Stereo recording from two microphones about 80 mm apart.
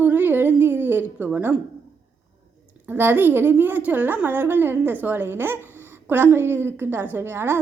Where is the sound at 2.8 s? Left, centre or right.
Right.